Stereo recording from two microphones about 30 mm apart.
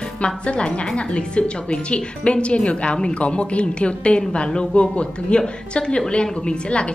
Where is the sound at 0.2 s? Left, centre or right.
Left.